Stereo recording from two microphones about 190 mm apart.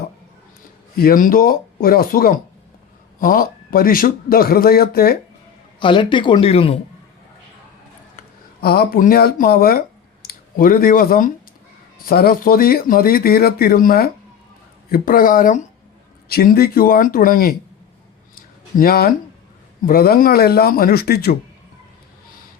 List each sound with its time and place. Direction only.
0.9 s speech: 50° left (ahead or behind)
5.8 s speech: 25° left (ahead or behind)
8.6 s speech: 55° left (ahead or behind)
18.8 s speech: 50° left (ahead or behind)